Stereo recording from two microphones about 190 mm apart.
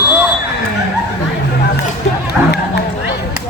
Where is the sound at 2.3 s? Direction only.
60° left (ahead or behind).